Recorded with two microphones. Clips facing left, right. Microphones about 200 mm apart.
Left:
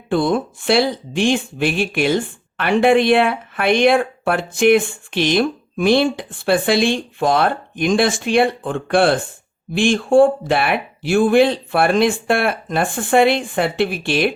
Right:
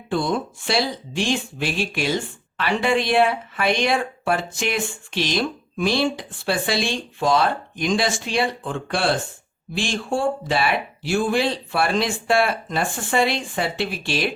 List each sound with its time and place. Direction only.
0.1 s speech: 55° left (ahead or behind)